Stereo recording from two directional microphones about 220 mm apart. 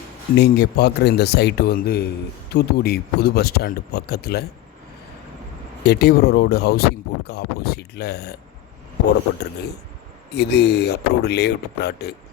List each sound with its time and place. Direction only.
0.3 s speech: 45° left (ahead or behind)
5.8 s speech: 45° left (ahead or behind)
10.3 s speech: 50° left (ahead or behind)